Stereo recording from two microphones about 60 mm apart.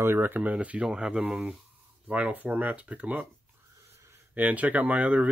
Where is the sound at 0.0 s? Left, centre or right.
Right.